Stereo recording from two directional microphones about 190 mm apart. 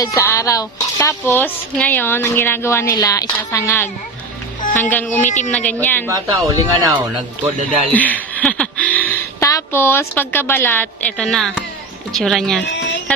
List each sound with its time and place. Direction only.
0.0 s a woman's voice: 15° left (ahead or behind)
6.1 s speech: 15° right (ahead or behind)
7.9 s a woman's voice: 10° left (ahead or behind)